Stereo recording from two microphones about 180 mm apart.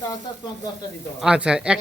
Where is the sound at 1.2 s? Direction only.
5° right (ahead or behind).